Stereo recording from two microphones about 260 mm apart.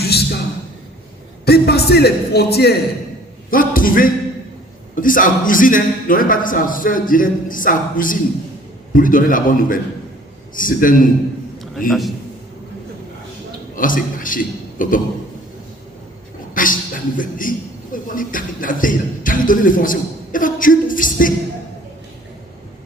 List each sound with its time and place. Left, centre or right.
0.0 s speech: left
1.5 s a man's voice: left
11.9 s a man's voice: centre
13.7 s a man's voice: left
16.6 s a sound: left
17.9 s a man's voice: left